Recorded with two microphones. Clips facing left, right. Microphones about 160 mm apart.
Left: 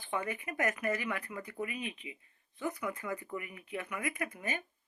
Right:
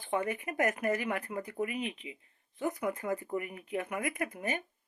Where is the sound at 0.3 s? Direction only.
45° right (ahead or behind).